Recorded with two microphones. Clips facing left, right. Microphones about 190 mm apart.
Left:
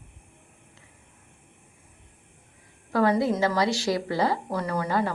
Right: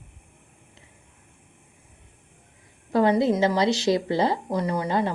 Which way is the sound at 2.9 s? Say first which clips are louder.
Right 2 dB; 20° right (ahead or behind).